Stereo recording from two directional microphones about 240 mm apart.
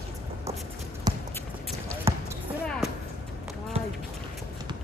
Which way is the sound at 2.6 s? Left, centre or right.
Centre.